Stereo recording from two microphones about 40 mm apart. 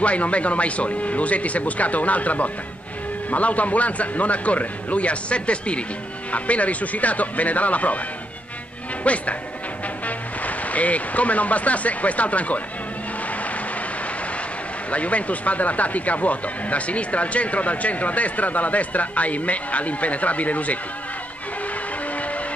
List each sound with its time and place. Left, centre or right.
0.0 s speech: left
9.0 s speech: left
14.9 s speech: left